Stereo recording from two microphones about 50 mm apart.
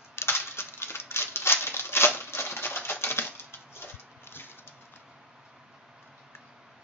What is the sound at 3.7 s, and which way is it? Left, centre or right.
Dog, left.